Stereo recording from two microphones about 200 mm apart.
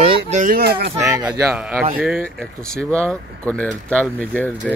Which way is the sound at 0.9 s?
15° right (ahead or behind).